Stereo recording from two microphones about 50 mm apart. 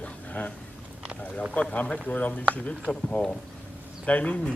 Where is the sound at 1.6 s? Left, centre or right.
Left.